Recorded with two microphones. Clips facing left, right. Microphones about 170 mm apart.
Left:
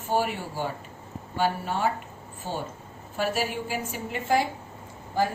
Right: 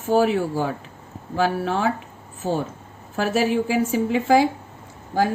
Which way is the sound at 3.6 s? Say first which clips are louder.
Right 11 dB; 90° right.